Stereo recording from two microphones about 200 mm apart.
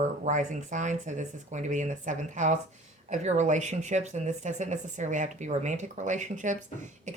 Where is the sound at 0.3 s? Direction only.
40° right (ahead or behind).